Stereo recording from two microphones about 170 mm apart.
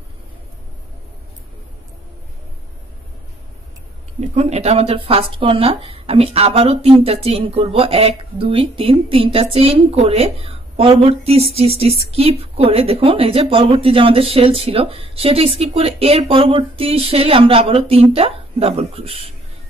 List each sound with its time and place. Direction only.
4.2 s a woman's voice: 45° right (ahead or behind)